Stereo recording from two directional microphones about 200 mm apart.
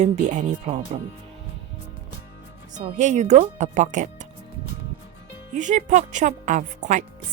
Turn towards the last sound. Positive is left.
turn(degrees=-40)  # may be behind; listen again after turning